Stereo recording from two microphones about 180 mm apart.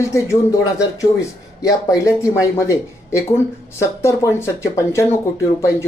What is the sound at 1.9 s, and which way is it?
Speech, 5° right (ahead or behind).